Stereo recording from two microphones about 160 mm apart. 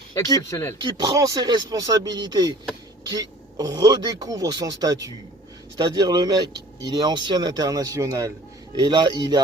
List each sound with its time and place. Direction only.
0.5 s speech: 20° left (ahead or behind)
0.8 s speech: 30° right (ahead or behind)